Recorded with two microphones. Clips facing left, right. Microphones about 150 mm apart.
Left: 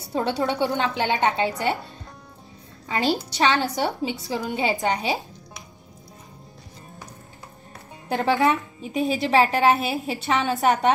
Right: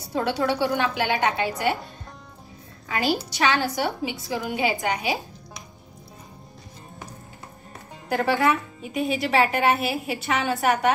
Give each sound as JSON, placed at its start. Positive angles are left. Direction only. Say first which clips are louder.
{"t": 0.1, "sound": "a woman's voice", "louder": "even", "side_deg": 20}
{"t": 2.9, "sound": "a woman's voice", "louder": "left 1 dB", "side_deg": 30}
{"t": 8.1, "sound": "a woman's voice", "louder": "left 1 dB", "side_deg": 25}